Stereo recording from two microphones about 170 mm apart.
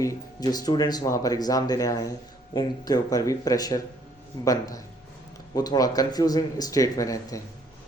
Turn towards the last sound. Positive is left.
turn(degrees=20)  # may be behind; listen again after turning